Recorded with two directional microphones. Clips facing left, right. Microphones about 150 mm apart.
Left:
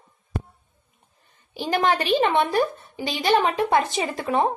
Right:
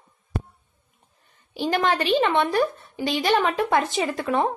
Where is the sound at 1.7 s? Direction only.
35° left (ahead or behind).